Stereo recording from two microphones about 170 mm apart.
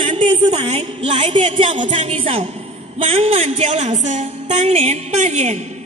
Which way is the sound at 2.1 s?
35° right (ahead or behind).